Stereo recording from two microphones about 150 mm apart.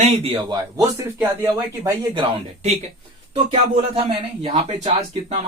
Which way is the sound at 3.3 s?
40° right (ahead or behind).